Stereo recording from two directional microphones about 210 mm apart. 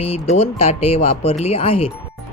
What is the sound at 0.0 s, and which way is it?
Speech, 30° left (ahead or behind).